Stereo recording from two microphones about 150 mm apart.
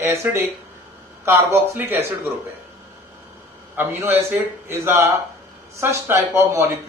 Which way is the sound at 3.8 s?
15° right (ahead or behind).